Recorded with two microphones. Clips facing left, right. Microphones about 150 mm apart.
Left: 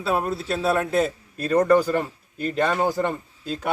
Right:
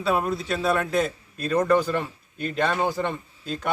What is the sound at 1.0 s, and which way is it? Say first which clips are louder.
A man's voice: left 2 dB; 35° left (ahead or behind).